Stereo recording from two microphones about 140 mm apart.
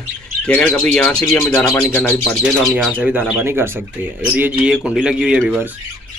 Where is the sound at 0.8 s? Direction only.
5° left (ahead or behind).